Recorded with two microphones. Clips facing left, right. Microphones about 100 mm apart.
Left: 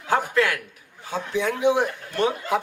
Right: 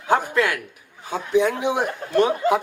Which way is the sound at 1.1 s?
20° right (ahead or behind).